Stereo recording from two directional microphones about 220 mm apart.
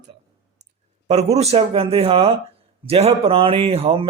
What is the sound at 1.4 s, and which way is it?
Speech, 25° right (ahead or behind).